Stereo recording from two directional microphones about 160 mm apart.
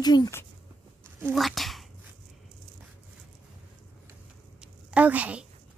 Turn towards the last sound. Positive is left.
turn(degrees=-10)  # may be behind; listen again after turning